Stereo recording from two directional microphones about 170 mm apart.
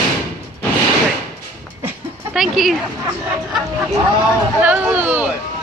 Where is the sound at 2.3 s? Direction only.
Centre (ahead or behind).